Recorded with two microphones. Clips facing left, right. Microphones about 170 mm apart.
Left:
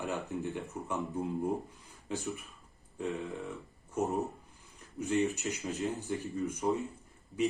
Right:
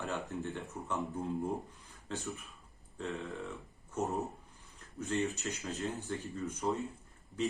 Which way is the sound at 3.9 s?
20° left (ahead or behind).